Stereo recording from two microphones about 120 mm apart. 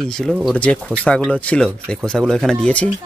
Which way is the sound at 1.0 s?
10° left (ahead or behind).